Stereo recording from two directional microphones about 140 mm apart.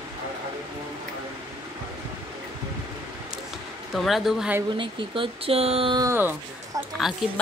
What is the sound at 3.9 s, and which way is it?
Speech, centre (ahead or behind).